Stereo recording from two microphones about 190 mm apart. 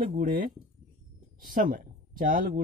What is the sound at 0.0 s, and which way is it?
Speech, 45° right (ahead or behind).